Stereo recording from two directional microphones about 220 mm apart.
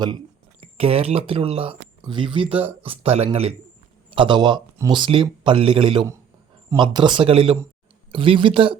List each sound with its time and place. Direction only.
0.6 s speech: 25° right (ahead or behind)